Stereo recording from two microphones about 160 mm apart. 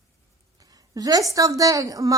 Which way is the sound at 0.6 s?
20° right (ahead or behind).